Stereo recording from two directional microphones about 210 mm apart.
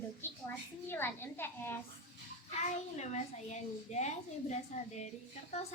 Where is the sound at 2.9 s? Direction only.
35° left (ahead or behind).